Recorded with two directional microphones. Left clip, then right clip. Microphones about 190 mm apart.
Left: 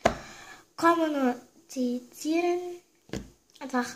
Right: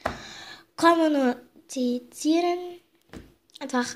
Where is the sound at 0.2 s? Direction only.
40° right (ahead or behind).